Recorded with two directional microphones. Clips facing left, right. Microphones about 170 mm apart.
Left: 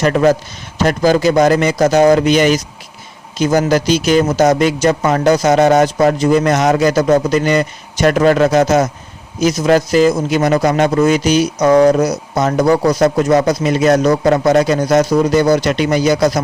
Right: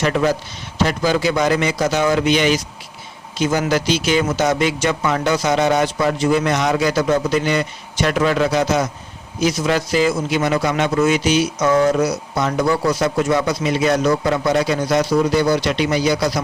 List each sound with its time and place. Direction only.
0.0 s speech: 45° left (ahead or behind)